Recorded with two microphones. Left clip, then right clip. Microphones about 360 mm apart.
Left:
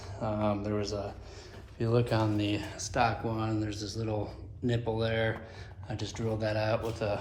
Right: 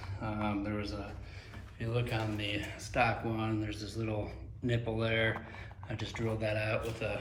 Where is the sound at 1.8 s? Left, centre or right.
Centre.